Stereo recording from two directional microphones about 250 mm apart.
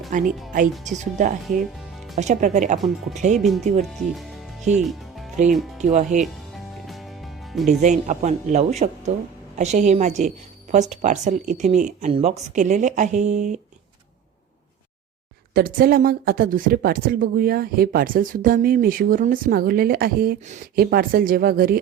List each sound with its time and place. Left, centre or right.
0.1 s a woman's voice: right
3.3 s speech: centre
4.7 s music: centre
5.8 s a woman's voice: right
6.8 s music: centre
7.7 s a woman's voice: right
15.5 s a woman's voice: right